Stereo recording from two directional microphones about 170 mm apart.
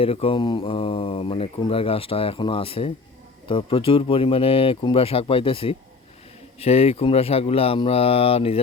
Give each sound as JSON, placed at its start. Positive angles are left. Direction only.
{"t": 0.0, "sound": "speech", "side_deg": 35}